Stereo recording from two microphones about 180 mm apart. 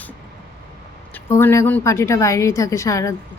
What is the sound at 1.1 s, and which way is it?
A woman's voice, 10° left (ahead or behind).